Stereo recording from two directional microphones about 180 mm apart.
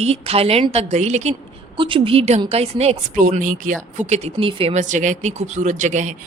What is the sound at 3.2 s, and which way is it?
Speech, 45° right (ahead or behind).